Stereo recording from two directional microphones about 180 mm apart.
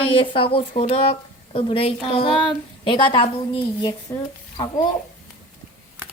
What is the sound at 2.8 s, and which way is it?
A woman's voice, 25° left (ahead or behind).